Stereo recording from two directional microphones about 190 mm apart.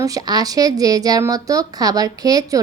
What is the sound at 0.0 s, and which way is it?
Speech, 20° right (ahead or behind).